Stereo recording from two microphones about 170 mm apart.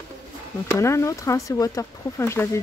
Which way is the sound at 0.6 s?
15° left (ahead or behind).